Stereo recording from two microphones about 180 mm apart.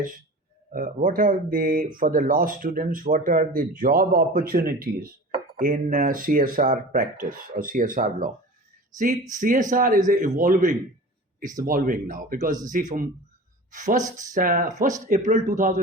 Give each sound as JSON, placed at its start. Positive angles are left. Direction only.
{"t": 0.7, "sound": "speech", "side_deg": -50}
{"t": 9.4, "sound": "speech", "side_deg": -45}